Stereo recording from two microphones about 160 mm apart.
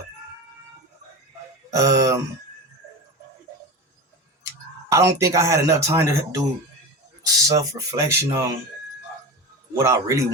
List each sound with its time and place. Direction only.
1.7 s speech: 20° right (ahead or behind)
4.9 s speech: 20° right (ahead or behind)
9.7 s speech: 20° right (ahead or behind)